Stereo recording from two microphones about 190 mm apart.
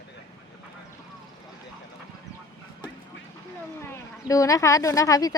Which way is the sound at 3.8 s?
15° left (ahead or behind).